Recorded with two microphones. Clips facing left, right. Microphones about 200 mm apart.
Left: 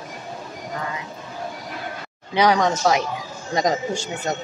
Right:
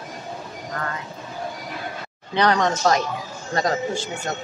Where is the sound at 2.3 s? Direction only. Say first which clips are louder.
Left 2 dB; 10° left (ahead or behind).